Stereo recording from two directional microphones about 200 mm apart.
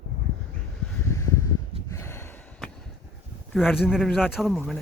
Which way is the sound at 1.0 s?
15° left (ahead or behind).